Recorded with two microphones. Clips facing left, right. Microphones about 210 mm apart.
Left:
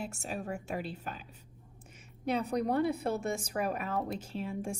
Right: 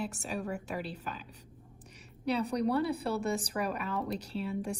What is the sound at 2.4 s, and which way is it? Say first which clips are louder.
A woman's voice: even; 35° right (ahead or behind).